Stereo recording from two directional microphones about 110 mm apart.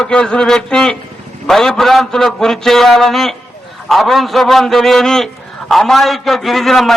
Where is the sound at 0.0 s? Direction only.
5° left (ahead or behind).